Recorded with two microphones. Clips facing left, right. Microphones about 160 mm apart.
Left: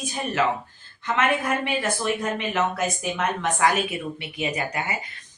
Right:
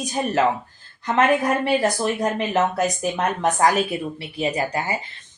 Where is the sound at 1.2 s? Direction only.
40° right (ahead or behind).